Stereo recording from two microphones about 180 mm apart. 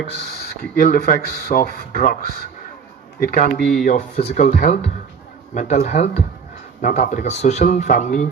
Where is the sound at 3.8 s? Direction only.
40° left (ahead or behind).